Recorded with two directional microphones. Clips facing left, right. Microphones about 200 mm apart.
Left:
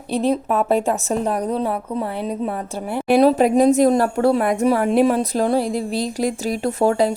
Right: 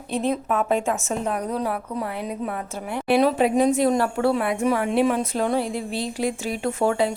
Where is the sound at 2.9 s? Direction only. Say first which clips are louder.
Left 5 dB; 35° left (ahead or behind).